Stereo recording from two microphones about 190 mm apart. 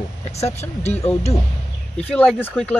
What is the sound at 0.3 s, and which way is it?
Speech, 35° left (ahead or behind).